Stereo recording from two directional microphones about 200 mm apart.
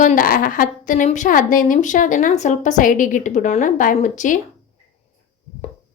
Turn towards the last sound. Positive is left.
turn(degrees=40)  # may be behind; listen again after turning